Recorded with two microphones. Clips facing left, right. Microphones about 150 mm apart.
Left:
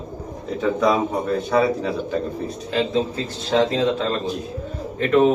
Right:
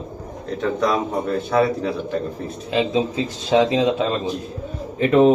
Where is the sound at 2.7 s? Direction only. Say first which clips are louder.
Right 2 dB; 15° right (ahead or behind).